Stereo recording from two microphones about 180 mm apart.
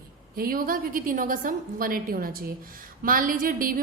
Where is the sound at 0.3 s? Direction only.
55° right (ahead or behind).